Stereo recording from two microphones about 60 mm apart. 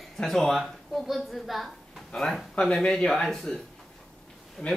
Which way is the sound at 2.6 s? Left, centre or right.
Centre.